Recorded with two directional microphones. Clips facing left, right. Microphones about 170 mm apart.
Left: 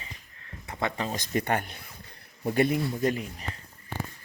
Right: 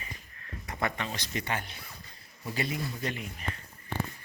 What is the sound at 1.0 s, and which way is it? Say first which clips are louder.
Speech: left 6 dB; 45° left (ahead or behind).